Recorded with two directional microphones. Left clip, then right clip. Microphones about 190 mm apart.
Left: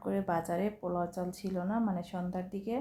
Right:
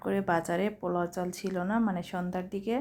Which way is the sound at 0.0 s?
30° right (ahead or behind).